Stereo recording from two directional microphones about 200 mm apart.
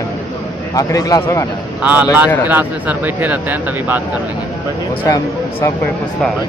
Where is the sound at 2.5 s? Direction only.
10° right (ahead or behind).